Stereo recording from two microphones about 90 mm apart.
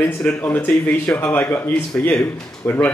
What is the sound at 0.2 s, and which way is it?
Speech, 15° left (ahead or behind).